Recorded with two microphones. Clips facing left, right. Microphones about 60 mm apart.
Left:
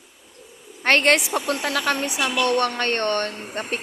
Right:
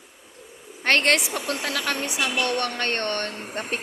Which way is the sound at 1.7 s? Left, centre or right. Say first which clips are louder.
Left 4 dB; left.